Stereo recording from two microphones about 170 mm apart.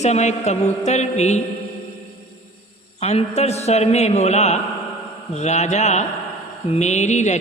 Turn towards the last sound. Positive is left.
turn(degrees=45)  # may be behind; listen again after turning